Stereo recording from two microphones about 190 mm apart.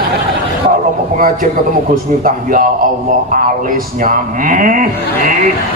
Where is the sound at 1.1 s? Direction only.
45° right (ahead or behind).